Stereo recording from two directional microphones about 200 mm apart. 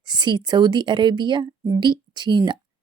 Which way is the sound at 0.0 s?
20° right (ahead or behind).